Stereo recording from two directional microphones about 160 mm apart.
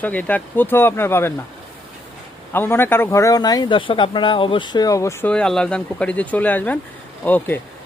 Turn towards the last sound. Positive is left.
turn(degrees=10)  # may be behind; listen again after turning